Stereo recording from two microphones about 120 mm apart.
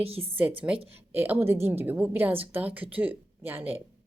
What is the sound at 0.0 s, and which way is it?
Speech, 55° right (ahead or behind).